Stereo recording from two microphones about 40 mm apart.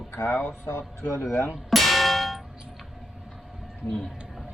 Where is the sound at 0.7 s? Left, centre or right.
Left.